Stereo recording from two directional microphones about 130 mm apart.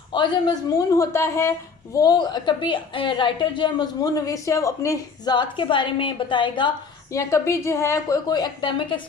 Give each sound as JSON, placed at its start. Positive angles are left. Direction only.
{"t": 0.1, "sound": "a woman's voice", "side_deg": 35}
{"t": 7.1, "sound": "a woman's voice", "side_deg": 25}